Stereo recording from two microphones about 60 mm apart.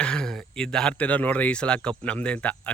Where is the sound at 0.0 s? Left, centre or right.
Centre.